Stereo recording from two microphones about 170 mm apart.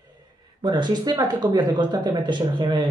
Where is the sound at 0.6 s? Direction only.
25° right (ahead or behind).